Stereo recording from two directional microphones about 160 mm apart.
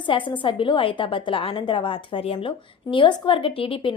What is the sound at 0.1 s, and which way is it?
A woman's voice, 30° left (ahead or behind).